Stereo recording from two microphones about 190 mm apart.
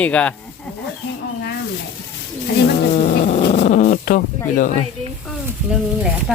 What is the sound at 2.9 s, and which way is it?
Cat, 45° left (ahead or behind).